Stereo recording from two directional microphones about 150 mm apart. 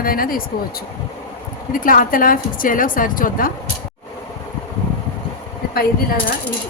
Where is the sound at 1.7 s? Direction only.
70° left (ahead or behind).